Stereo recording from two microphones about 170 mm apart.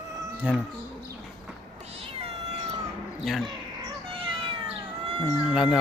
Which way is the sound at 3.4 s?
25° right (ahead or behind).